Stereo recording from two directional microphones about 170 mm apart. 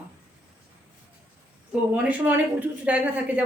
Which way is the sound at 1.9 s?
10° right (ahead or behind).